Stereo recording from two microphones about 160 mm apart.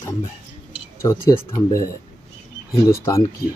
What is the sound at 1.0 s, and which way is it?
Speech, 15° left (ahead or behind).